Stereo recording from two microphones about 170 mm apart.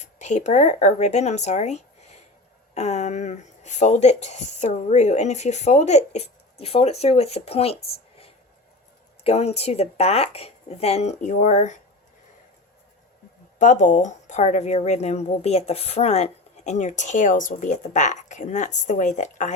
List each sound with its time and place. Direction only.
0.0 s speech: 45° left (ahead or behind)
9.2 s speech: 40° left (ahead or behind)
13.6 s speech: 50° left (ahead or behind)